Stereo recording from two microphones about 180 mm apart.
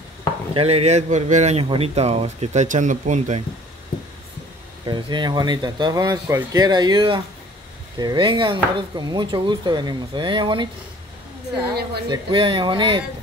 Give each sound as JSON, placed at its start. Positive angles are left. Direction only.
{"t": 0.6, "sound": "speech", "side_deg": -35}
{"t": 4.8, "sound": "speech", "side_deg": -25}
{"t": 11.6, "sound": "a woman's voice", "side_deg": -60}
{"t": 12.1, "sound": "speech", "side_deg": -25}